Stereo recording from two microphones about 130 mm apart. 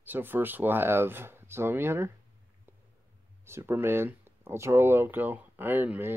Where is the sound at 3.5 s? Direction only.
20° right (ahead or behind).